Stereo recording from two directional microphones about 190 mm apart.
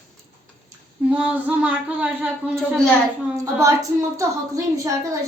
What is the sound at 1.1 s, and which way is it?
Speech, 5° right (ahead or behind).